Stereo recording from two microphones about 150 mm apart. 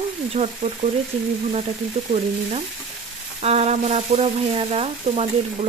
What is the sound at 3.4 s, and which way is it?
Frying, 45° right (ahead or behind).